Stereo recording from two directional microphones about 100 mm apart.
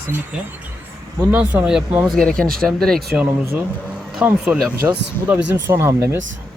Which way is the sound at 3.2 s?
25° right (ahead or behind).